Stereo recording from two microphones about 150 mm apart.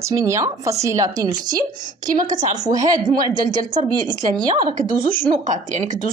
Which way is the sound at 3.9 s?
30° right (ahead or behind).